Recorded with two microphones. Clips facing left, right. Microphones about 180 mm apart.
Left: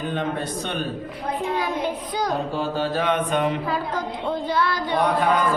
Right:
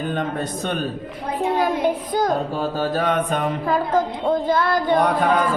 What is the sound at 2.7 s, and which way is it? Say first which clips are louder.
Music: right 2 dB; 40° right (ahead or behind).